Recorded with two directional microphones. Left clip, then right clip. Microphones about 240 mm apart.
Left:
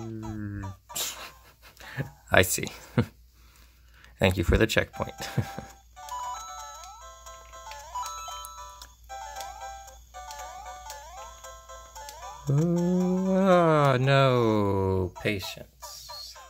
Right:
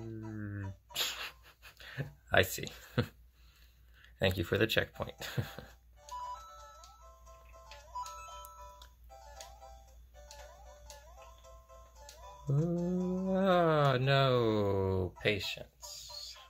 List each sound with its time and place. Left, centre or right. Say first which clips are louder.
0.0 s sneeze: left 7 dB; centre
4.2 s speech: left 7 dB; left
12.4 s speech: left 8 dB; left